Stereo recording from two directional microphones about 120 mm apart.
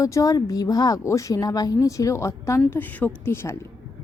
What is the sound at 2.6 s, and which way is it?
Speech, 15° left (ahead or behind).